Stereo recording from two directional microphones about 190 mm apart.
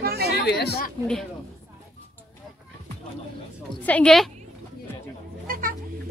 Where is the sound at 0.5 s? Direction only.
60° left (ahead or behind).